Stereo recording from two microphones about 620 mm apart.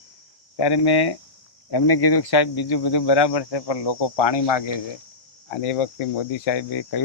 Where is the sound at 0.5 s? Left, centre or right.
Left.